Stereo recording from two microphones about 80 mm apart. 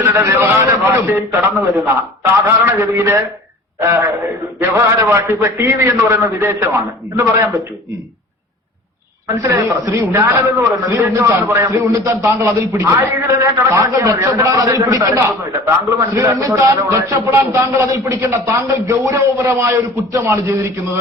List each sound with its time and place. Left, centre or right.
0.0 s a man's voice: right
9.4 s a man's voice: right